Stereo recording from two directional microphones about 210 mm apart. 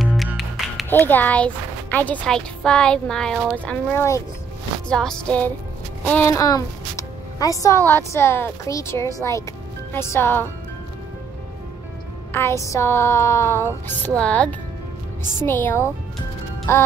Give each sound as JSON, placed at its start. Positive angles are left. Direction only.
{"t": 0.0, "sound": "music", "side_deg": 0}
{"t": 0.9, "sound": "a woman's voice", "side_deg": 10}
{"t": 12.3, "sound": "a woman's voice", "side_deg": 10}